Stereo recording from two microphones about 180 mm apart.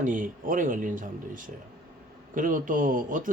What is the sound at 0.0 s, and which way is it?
Speech, 50° right (ahead or behind).